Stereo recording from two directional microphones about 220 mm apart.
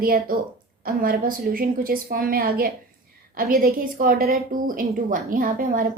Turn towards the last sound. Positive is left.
turn(degrees=-40)  # may be behind; listen again after turning